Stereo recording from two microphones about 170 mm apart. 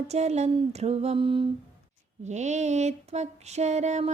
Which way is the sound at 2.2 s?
45° right (ahead or behind).